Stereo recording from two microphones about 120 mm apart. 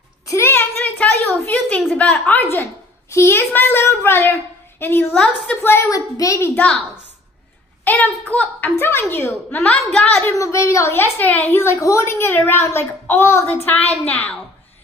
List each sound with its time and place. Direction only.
0.3 s a sound: 20° left (ahead or behind)
1.5 s a woman's voice: 10° left (ahead or behind); by 6.5 s 25° left (ahead or behind)
6.5 s a woman's voice: 10° left (ahead or behind)
7.8 s a woman's voice: 15° left (ahead or behind)
10.2 s a child's voice: 25° left (ahead or behind)